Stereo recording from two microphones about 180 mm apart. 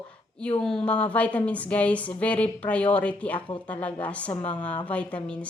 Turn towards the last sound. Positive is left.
turn(degrees=5)  # may be behind; listen again after turning